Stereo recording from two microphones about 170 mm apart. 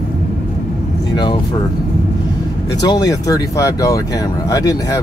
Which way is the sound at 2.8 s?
25° left (ahead or behind).